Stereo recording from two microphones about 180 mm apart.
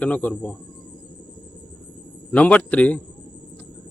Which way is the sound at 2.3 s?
10° left (ahead or behind).